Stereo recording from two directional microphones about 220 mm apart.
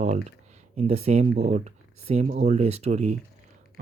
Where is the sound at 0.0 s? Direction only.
30° right (ahead or behind).